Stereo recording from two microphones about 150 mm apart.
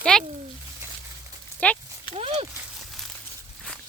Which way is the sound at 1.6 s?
10° left (ahead or behind).